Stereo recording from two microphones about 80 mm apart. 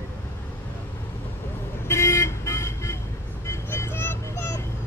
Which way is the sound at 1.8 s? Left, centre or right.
Left.